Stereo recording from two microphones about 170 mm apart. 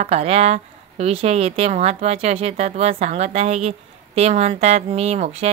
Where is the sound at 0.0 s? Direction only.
40° right (ahead or behind).